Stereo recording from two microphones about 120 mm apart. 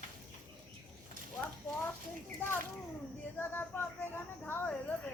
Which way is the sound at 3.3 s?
15° left (ahead or behind).